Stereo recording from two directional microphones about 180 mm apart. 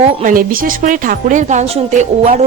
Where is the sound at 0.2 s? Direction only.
50° right (ahead or behind).